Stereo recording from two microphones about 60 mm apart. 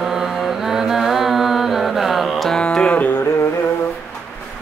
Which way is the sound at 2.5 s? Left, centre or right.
Centre.